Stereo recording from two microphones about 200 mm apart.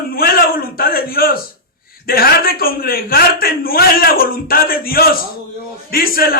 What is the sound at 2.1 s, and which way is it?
Speech, 50° left (ahead or behind).